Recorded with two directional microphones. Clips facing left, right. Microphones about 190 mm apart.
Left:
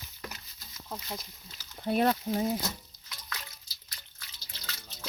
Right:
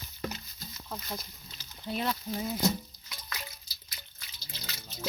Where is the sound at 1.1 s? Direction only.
5° left (ahead or behind).